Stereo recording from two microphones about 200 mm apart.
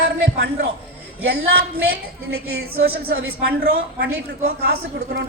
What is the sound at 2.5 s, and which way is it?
A woman's voice, 50° right (ahead or behind).